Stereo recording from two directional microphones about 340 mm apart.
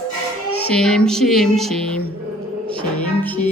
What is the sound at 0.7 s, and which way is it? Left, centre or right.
Speech, centre.